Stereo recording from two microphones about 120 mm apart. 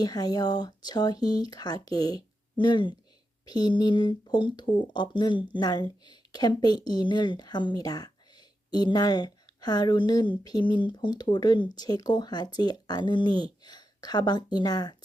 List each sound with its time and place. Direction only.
0.0 s speech: 35° left (ahead or behind)